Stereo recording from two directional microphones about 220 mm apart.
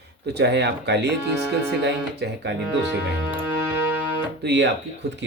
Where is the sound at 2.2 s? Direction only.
50° right (ahead or behind).